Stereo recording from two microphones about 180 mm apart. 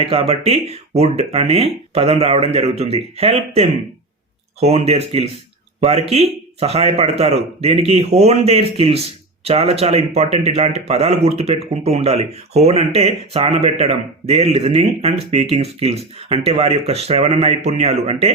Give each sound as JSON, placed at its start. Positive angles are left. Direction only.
{"t": 0.0, "sound": "speech", "side_deg": -30}